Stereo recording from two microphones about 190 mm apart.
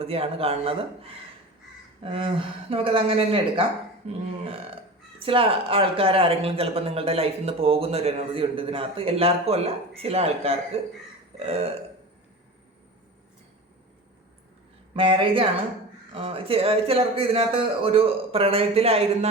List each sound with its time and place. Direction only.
0.0 s speech: 30° right (ahead or behind)
14.9 s speech: 30° right (ahead or behind)